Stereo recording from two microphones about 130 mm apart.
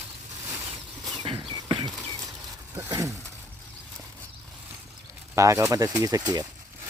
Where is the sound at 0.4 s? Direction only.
15° right (ahead or behind).